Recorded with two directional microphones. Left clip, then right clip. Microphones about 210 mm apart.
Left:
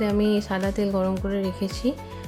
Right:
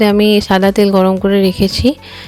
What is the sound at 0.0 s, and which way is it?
Speech, 40° right (ahead or behind).